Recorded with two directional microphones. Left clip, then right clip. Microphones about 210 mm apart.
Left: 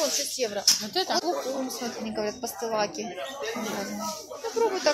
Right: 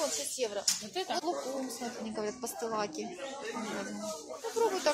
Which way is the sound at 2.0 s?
Centre (ahead or behind).